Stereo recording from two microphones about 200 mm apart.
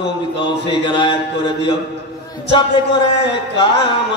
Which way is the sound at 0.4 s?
25° left (ahead or behind).